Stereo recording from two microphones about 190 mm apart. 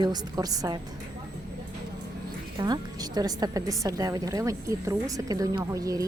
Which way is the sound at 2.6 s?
20° right (ahead or behind).